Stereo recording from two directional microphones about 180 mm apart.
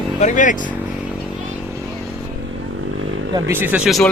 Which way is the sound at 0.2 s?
45° left (ahead or behind).